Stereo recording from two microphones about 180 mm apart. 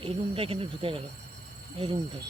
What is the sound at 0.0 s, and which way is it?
Speech, 30° right (ahead or behind).